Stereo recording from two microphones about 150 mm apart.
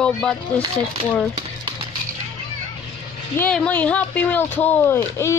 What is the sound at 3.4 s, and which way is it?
Speech, 10° left (ahead or behind).